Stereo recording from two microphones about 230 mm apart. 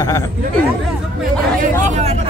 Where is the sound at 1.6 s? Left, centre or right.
Right.